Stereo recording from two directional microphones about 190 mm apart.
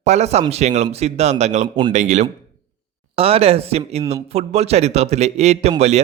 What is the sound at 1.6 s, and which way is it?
Speech, 25° right (ahead or behind).